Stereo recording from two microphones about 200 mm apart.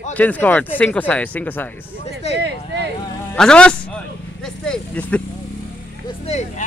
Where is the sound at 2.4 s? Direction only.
60° right (ahead or behind).